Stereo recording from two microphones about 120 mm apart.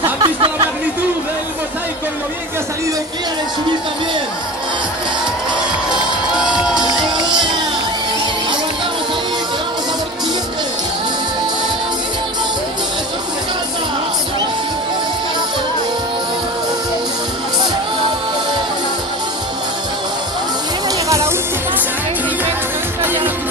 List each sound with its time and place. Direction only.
0.2 s a sound: 40° right (ahead or behind)
5.9 s crowd: 5° right (ahead or behind)
21.1 s music: 25° right (ahead or behind)